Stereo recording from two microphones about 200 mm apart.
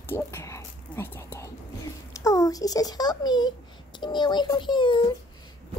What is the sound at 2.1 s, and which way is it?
A child's voice, 15° left (ahead or behind).